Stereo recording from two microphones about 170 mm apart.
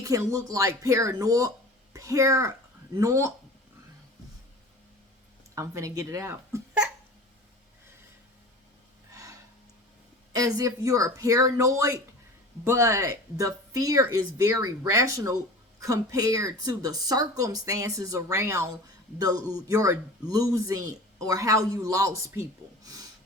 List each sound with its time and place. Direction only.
0.0 s speech: 20° right (ahead or behind)
5.5 s speech: 20° right (ahead or behind)
10.3 s speech: 20° right (ahead or behind)